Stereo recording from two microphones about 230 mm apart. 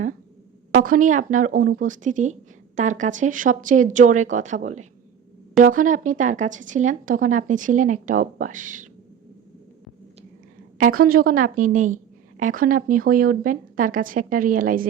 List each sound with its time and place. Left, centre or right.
0.8 s speech: right
10.8 s speech: right